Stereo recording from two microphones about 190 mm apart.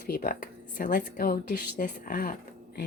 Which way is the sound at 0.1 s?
45° left (ahead or behind).